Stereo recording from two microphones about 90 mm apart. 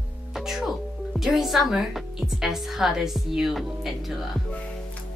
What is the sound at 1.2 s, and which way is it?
A woman's voice, centre (ahead or behind).